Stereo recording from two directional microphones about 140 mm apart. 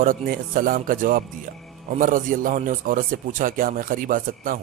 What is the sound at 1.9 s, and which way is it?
A man's voice, 70° right (ahead or behind).